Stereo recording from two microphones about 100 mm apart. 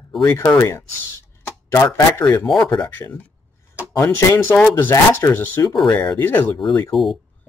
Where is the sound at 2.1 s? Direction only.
20° left (ahead or behind).